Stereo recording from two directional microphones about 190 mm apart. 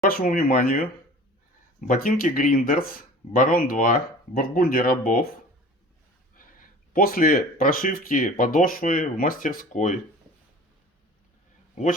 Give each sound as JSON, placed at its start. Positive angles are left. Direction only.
{"t": 0.0, "sound": "speech", "side_deg": 50}
{"t": 1.9, "sound": "speech", "side_deg": 45}
{"t": 6.3, "sound": "speech", "side_deg": 45}
{"t": 11.7, "sound": "a man's voice", "side_deg": 40}